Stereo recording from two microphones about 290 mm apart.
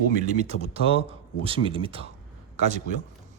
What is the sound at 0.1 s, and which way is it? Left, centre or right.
Speech, right.